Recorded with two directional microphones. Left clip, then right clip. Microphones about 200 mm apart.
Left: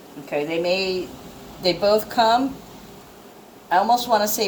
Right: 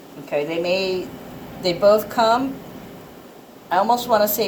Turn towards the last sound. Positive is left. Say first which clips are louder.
# right 1 dB
turn(degrees=30)  # may be behind; listen again after turning